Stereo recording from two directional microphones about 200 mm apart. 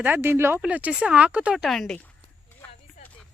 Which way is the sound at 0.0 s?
10° right (ahead or behind).